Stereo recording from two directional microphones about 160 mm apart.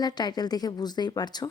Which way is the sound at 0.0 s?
25° left (ahead or behind).